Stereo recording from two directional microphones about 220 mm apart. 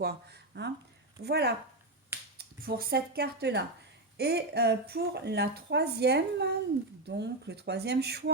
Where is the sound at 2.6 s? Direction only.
45° right (ahead or behind).